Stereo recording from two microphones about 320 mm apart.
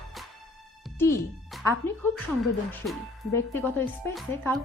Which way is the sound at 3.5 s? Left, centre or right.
Centre.